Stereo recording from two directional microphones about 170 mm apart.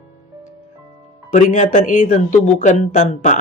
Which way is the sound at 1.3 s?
45° left (ahead or behind).